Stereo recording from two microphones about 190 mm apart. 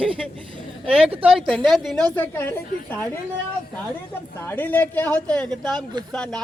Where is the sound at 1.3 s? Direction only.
Centre (ahead or behind).